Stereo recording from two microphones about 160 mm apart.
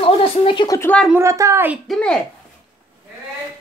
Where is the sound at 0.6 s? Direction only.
20° left (ahead or behind).